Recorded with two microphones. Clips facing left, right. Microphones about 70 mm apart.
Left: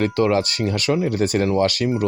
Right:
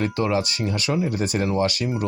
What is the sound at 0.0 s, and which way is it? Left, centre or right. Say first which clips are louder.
Speech: left 4 dB; left.